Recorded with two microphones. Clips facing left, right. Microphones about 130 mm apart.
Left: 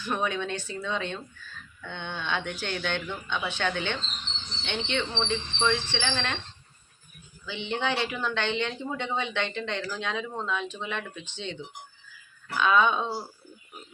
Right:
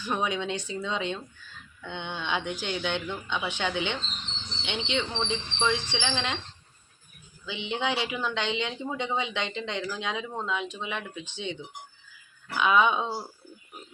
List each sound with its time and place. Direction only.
0.0 s speech: 15° right (ahead or behind)
7.4 s speech: 15° right (ahead or behind)
12.5 s speech: 15° right (ahead or behind)